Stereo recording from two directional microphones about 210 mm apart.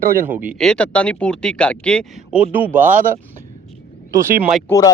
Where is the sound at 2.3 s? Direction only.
10° right (ahead or behind).